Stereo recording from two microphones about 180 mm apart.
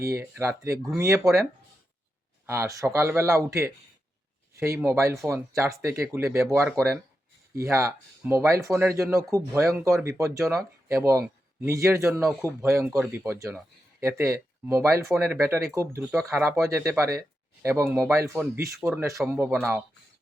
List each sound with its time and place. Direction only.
0.1 s speech: 10° right (ahead or behind)
2.5 s speech: 15° right (ahead or behind)
19.2 s speech: 5° right (ahead or behind)